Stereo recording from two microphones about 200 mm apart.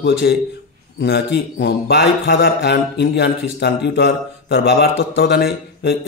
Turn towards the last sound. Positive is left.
turn(degrees=55)  # may be behind; listen again after turning